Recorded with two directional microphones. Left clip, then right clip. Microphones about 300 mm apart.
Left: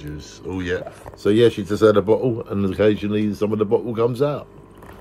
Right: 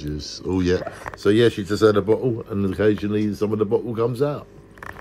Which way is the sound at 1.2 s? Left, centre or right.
Centre.